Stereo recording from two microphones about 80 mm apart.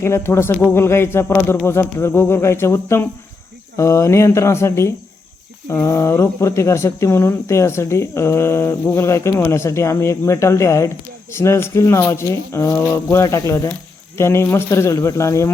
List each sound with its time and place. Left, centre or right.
0.0 s speech: left